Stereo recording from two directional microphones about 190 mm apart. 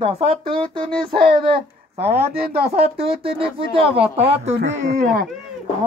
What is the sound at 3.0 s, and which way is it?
Speech, 30° right (ahead or behind).